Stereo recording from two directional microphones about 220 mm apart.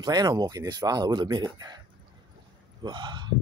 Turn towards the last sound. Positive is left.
turn(degrees=-20)  # may be behind; listen again after turning